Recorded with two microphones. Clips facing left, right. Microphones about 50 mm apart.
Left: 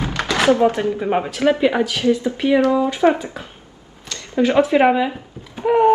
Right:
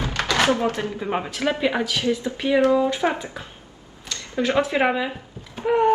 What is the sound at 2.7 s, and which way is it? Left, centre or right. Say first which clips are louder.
Speech: left 1 dB; centre.